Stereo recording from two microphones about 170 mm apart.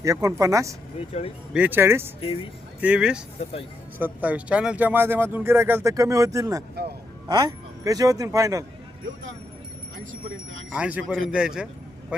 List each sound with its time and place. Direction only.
0.0 s speech: 20° right (ahead or behind)
0.9 s speech: 35° left (ahead or behind)
1.5 s a man's voice: 10° right (ahead or behind)
10.7 s a man's voice: 10° right (ahead or behind)